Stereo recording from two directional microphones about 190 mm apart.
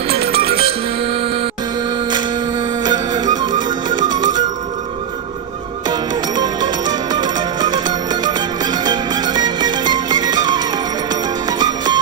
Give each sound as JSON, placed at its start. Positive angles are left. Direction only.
{"t": 0.1, "sound": "music", "side_deg": -30}
{"t": 2.8, "sound": "music", "side_deg": -20}
{"t": 5.9, "sound": "music", "side_deg": -20}